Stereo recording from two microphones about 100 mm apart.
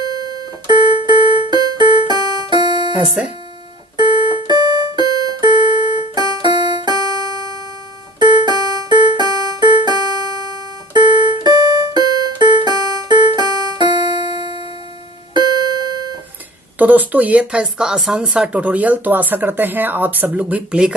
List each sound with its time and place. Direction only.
1.2 s music: 60° left (ahead or behind)
1.5 s music: 45° right (ahead or behind)
4.0 s music: 60° left (ahead or behind)
4.4 s music: 45° right (ahead or behind)
5.5 s music: 55° left (ahead or behind)
6.1 s music: 50° right (ahead or behind)
8.4 s music: 40° right (ahead or behind)
11.0 s music: 55° left (ahead or behind)
11.4 s music: 35° right (ahead or behind)
11.9 s music: 45° right (ahead or behind)
16.7 s speech: 15° right (ahead or behind)